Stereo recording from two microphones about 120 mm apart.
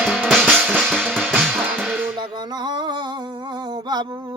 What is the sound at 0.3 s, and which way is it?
Drum kit, centre (ahead or behind).